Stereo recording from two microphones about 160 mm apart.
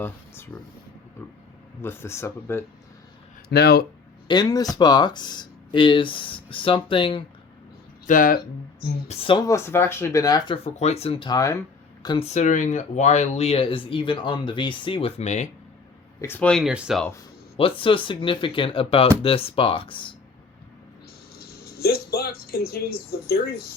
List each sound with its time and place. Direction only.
0.0 s speech: 10° left (ahead or behind)
1.8 s speech: 15° left (ahead or behind)
3.5 s speech: 85° left
4.3 s speech: 25° left (ahead or behind)
8.0 s speech: 55° left (ahead or behind)
9.0 s speech: 30° left (ahead or behind)
12.0 s speech: 30° left (ahead or behind)
12.3 s speech: 50° left (ahead or behind)
16.2 s speech: 10° left (ahead or behind); by 17.0 s 5° right (ahead or behind)
17.6 s speech: 35° left (ahead or behind)
21.3 s a sound: 75° left (ahead or behind)
23.1 s speech: 75° left (ahead or behind)